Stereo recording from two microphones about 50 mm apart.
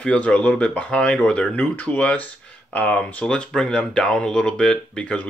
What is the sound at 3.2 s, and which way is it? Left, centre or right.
Speech, centre.